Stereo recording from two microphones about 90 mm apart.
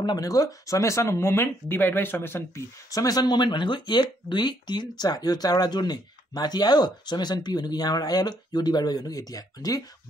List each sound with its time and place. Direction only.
0.0 s speech: 45° left (ahead or behind); by 2.6 s 25° left (ahead or behind)
2.9 s speech: 40° left (ahead or behind)